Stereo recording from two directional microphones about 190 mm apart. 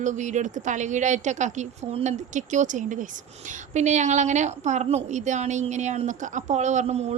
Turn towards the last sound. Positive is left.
turn(degrees=-35)  # may be behind; listen again after turning